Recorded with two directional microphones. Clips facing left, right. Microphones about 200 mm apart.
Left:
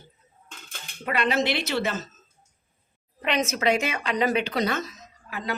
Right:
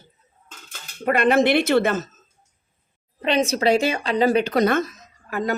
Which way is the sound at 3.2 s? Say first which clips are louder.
Right 5 dB; 30° right (ahead or behind).